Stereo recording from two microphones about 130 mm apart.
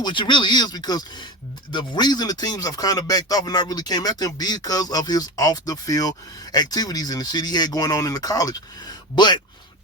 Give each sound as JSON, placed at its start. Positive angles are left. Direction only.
{"t": 0.0, "sound": "speech", "side_deg": 40}